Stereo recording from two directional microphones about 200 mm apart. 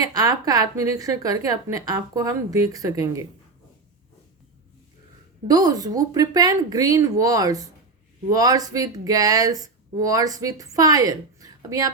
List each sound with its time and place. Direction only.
0.0 s speech: 15° right (ahead or behind)
5.5 s speech: 20° right (ahead or behind)